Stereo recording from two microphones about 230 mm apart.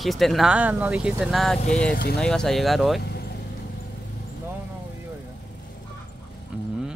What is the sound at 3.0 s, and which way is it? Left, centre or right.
Vehicle, left.